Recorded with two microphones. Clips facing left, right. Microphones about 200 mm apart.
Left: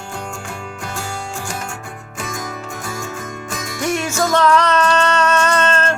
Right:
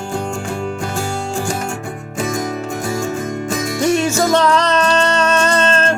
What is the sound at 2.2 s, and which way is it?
Music, 30° right (ahead or behind).